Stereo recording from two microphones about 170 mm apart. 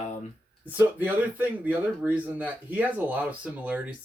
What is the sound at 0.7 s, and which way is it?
Speech, 10° right (ahead or behind).